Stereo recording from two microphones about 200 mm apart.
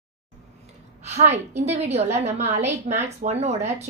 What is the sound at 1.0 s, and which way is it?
A woman's voice, 35° right (ahead or behind).